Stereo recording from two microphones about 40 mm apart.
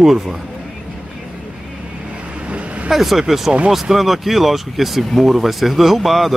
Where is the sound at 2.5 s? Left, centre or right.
Right.